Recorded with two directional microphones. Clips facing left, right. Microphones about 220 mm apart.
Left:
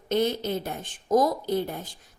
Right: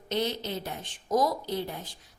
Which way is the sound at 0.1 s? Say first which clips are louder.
Left 5 dB; 50° left (ahead or behind).